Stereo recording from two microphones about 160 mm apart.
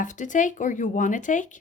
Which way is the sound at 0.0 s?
50° left (ahead or behind).